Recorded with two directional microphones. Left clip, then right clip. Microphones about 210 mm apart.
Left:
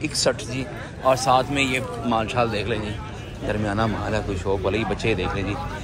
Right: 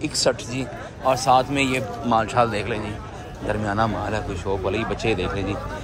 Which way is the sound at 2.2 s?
10° right (ahead or behind).